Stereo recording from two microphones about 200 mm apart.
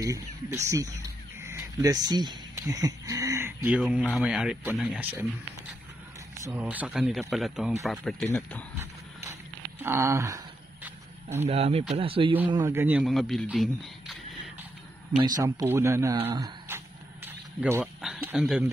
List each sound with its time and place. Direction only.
0.0 s a man's voice: 15° right (ahead or behind)
6.4 s a man's voice: 10° right (ahead or behind)
9.8 s a sound: 15° right (ahead or behind)
11.4 s a man's voice: 30° right (ahead or behind); by 14.1 s centre (ahead or behind)
15.2 s speech: 20° right (ahead or behind)
16.3 s a sound: 15° right (ahead or behind)